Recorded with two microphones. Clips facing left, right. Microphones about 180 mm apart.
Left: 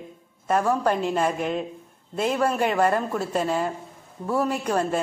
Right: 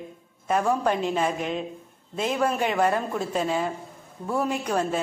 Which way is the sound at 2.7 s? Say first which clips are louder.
Left 2 dB; 5° right (ahead or behind).